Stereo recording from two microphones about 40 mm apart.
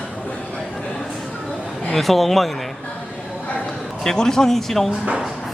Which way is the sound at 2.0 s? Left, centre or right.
Centre.